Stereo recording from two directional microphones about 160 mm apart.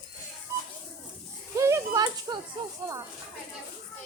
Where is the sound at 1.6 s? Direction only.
20° right (ahead or behind).